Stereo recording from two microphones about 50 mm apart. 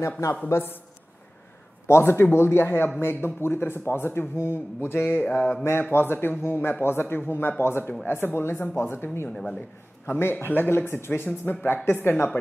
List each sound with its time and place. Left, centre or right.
0.5 s speech: left
1.9 s a man's voice: left
5.2 s mantra: left
5.6 s a man's voice: left
6.4 s speech: left
6.7 s a man's voice: left
9.3 s a man's voice: centre
10.0 s a man's voice: left